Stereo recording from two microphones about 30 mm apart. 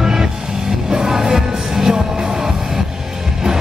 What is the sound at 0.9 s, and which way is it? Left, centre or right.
Music, centre.